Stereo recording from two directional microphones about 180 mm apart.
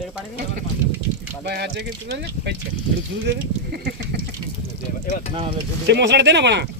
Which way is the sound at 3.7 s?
60° right (ahead or behind).